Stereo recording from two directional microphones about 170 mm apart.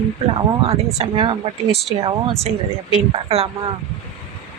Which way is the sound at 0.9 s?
30° right (ahead or behind).